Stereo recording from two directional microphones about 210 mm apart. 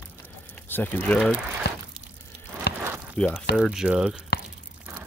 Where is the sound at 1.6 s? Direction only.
50° left (ahead or behind).